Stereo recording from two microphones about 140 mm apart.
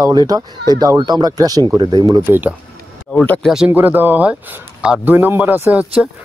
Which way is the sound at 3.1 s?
10° left (ahead or behind).